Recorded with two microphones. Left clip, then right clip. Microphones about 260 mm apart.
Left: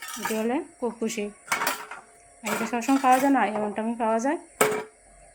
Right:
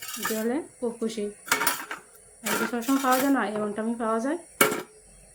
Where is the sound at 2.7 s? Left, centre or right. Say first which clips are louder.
Left 5 dB; centre.